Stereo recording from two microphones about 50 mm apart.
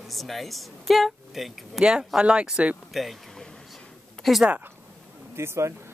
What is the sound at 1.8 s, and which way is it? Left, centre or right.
Speech, centre.